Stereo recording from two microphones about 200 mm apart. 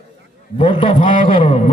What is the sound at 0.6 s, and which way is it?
A man's voice, 25° left (ahead or behind).